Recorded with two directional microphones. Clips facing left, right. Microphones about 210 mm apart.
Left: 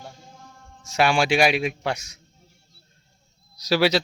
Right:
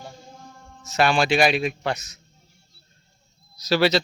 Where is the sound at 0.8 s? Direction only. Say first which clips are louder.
Even; 10° left (ahead or behind).